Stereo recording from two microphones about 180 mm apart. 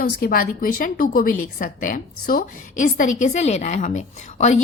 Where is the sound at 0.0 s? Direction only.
55° left (ahead or behind).